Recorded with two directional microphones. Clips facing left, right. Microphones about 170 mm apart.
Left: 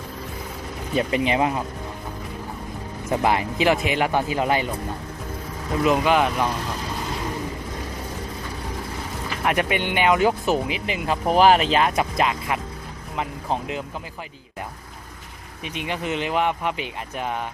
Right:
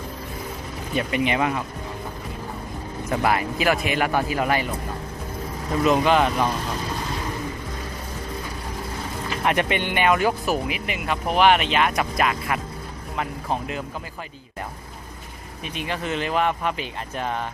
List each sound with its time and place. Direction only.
0.9 s speech: 30° left (ahead or behind)
3.1 s speech: 20° left (ahead or behind)
5.8 s speech: 10° left (ahead or behind)
9.4 s speech: 5° left (ahead or behind)
15.6 s speech: 20° left (ahead or behind)